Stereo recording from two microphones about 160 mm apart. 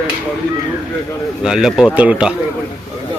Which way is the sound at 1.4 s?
5° right (ahead or behind).